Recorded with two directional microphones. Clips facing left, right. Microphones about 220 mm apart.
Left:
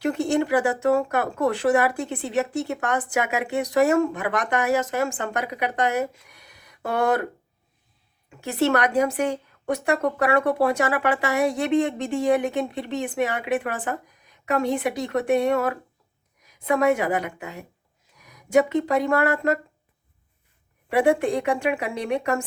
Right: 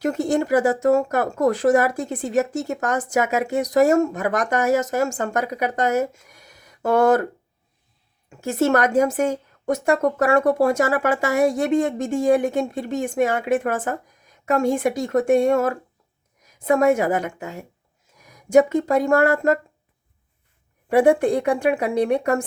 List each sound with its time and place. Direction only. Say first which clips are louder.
0.0 s a woman's voice: right 1 dB; 45° right (ahead or behind)
8.3 s a woman's voice: right 3 dB; 45° right (ahead or behind)